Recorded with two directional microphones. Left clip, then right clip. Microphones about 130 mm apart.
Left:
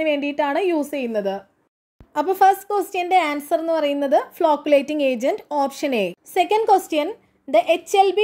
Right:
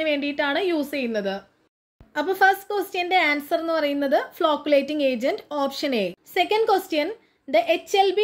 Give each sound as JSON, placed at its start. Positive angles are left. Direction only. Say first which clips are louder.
{"t": 0.0, "sound": "a woman's voice", "louder": "left 3 dB", "side_deg": 50}
{"t": 2.1, "sound": "a woman's voice", "louder": "left 3 dB", "side_deg": 45}